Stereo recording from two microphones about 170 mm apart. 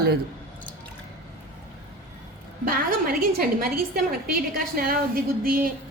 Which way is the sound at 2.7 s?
60° right (ahead or behind).